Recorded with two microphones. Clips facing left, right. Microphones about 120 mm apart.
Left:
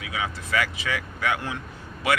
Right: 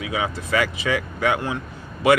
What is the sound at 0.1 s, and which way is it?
Speech, 25° right (ahead or behind).